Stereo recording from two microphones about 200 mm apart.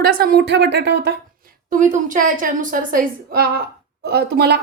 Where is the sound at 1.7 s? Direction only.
40° right (ahead or behind).